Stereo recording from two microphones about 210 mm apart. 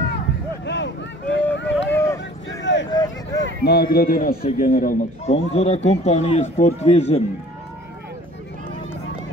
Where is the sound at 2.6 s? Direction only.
60° left (ahead or behind).